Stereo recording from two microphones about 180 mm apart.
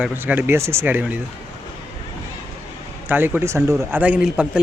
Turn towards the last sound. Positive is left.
turn(degrees=-5)  # may be behind; listen again after turning